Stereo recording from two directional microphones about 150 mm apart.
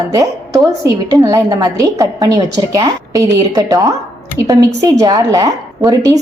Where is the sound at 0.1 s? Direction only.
25° right (ahead or behind).